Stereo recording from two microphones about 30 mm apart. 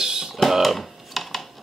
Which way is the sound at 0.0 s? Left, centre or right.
Right.